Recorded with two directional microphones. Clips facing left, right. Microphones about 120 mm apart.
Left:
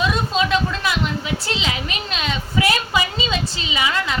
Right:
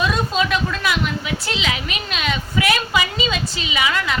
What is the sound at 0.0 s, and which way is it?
A woman's voice, 25° left (ahead or behind).